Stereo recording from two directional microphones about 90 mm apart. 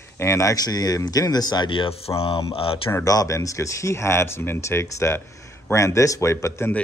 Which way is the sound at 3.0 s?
40° left (ahead or behind).